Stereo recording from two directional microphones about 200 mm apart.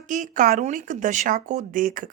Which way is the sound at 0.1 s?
40° right (ahead or behind).